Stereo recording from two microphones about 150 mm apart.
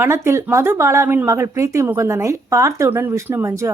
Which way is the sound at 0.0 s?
15° right (ahead or behind).